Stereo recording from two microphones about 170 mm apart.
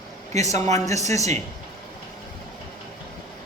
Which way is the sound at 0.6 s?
20° left (ahead or behind).